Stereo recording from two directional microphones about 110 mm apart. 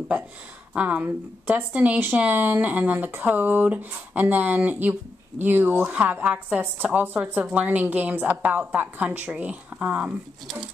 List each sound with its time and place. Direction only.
0.7 s speech: 15° right (ahead or behind)